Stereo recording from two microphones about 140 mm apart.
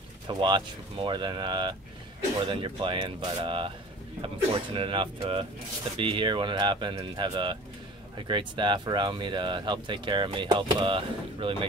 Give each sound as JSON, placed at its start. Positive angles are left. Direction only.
{"t": 0.3, "sound": "speech", "side_deg": -35}